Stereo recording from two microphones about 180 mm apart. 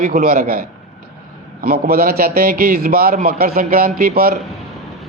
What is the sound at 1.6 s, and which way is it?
A man's voice, 55° right (ahead or behind).